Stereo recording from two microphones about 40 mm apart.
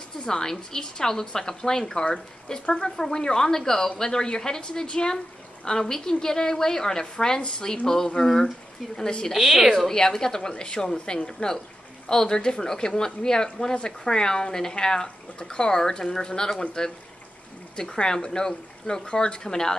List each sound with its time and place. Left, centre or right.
0.2 s speech: centre
9.4 s a woman's voice: centre
9.8 s speech: centre
17.7 s speech: centre